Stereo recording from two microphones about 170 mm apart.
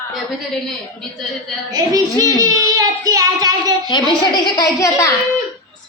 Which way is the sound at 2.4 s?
20° right (ahead or behind).